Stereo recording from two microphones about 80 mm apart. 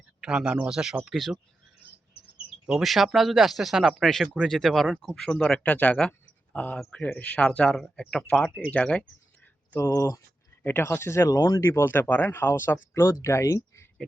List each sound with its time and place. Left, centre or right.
0.2 s speech: centre
2.6 s speech: centre
5.5 s speech: centre
10.6 s speech: left
11.3 s speech: left
11.6 s speech: left